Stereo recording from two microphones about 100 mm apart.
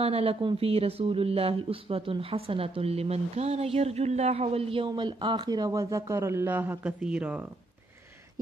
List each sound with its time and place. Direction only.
0.0 s speech: 80° right
4.8 s speech: 50° right (ahead or behind); by 7.4 s 15° right (ahead or behind)